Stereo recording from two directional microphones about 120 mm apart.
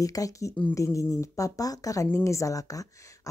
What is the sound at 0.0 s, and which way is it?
A woman's voice, 30° left (ahead or behind).